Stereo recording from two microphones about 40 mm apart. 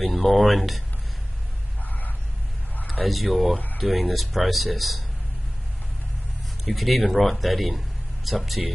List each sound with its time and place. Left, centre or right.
0.0 s speech: centre
1.9 s a sound: left
2.9 s speech: centre
6.6 s speech: centre